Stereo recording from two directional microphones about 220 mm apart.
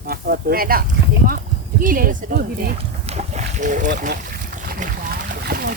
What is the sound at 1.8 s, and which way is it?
Speech, 40° right (ahead or behind).